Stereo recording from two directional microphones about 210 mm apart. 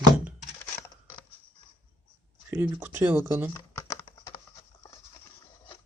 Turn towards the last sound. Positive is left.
turn(degrees=20)  # may be behind; listen again after turning